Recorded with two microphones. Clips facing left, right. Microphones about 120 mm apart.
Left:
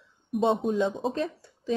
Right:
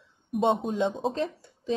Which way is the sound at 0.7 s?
20° right (ahead or behind).